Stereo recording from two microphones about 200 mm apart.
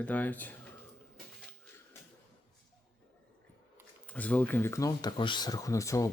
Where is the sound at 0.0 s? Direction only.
10° left (ahead or behind).